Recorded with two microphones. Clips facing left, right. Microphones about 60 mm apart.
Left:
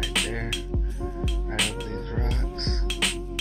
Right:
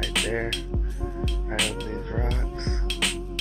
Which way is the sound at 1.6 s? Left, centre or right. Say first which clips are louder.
Right 1 dB; centre.